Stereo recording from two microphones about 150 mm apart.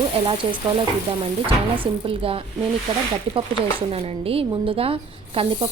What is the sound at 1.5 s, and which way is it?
Speech, 35° right (ahead or behind).